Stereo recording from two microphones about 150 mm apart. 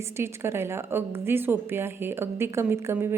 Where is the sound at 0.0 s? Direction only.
15° right (ahead or behind).